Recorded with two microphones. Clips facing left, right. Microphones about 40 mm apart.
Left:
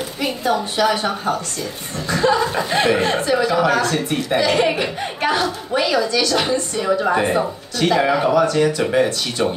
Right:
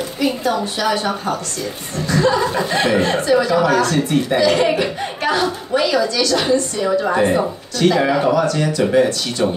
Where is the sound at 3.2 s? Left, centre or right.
Left.